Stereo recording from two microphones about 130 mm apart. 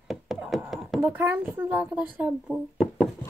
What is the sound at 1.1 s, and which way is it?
Speech, 15° right (ahead or behind).